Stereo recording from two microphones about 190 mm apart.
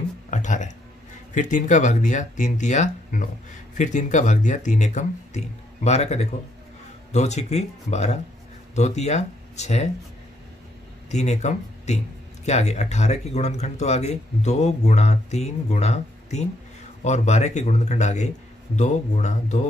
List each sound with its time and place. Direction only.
0.3 s music: 40° left (ahead or behind)
1.3 s speech: 40° left (ahead or behind)
11.1 s speech: 35° left (ahead or behind)